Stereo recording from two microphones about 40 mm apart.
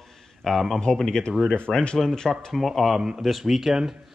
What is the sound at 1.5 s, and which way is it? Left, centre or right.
Speech, left.